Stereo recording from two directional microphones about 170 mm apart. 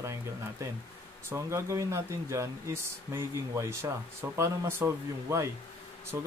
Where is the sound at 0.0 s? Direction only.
15° right (ahead or behind).